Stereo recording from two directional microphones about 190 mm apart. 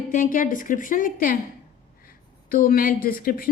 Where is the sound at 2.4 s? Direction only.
50° left (ahead or behind).